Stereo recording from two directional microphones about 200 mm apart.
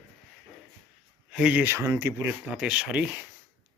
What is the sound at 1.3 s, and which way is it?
Speech, 5° right (ahead or behind).